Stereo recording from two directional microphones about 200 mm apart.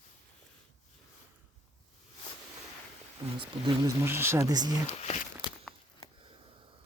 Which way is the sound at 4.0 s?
10° right (ahead or behind).